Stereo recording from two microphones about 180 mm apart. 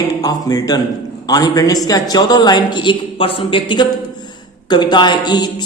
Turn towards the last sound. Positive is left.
turn(degrees=25)  # may be behind; listen again after turning